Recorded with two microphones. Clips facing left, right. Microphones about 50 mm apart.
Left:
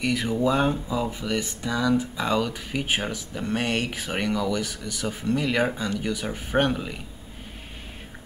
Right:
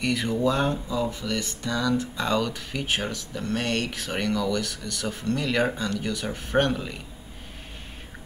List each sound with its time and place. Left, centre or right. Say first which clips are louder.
0.0 s speech: even; centre